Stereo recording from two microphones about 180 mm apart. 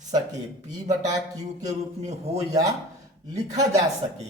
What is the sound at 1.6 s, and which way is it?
Speech, 40° right (ahead or behind).